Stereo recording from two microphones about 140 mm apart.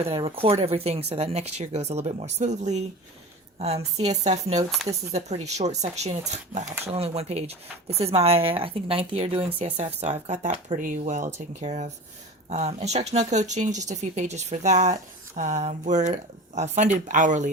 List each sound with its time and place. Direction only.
0.0 s speech: 45° right (ahead or behind)
10.8 s speech: 65° right (ahead or behind)